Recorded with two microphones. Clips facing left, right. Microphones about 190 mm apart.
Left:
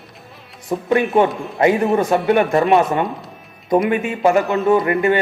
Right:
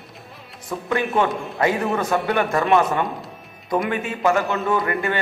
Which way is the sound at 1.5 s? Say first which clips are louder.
Left 7 dB; 25° left (ahead or behind).